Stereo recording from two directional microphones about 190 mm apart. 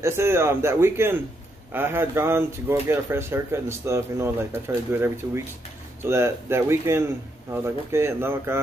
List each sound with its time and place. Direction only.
0.0 s speech: 15° right (ahead or behind)